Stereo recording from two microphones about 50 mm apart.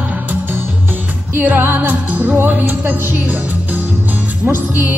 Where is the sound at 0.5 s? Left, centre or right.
Right.